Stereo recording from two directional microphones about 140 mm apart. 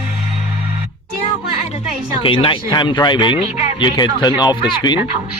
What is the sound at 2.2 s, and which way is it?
Speech, 40° left (ahead or behind).